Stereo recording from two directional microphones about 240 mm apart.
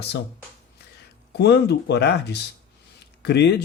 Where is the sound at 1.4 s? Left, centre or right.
Left.